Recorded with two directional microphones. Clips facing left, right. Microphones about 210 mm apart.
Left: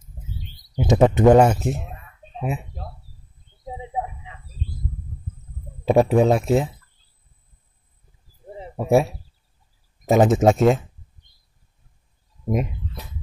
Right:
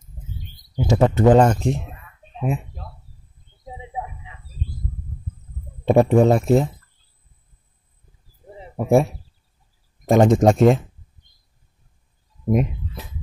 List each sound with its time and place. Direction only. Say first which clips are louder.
0.4 s a sound: left 1 dB; 50° right (ahead or behind)
0.7 s speech: left 1 dB; 20° left (ahead or behind); by 1.9 s 5° left (ahead or behind)
3.8 s a sound: left 3 dB; 35° left (ahead or behind)
5.9 s speech: right 2 dB; centre (ahead or behind)
8.7 s speech: right 1 dB; centre (ahead or behind)
12.4 s speech: right 4 dB; centre (ahead or behind)